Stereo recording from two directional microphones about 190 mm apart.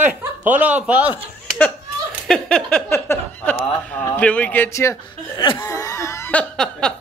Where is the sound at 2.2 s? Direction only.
5° left (ahead or behind).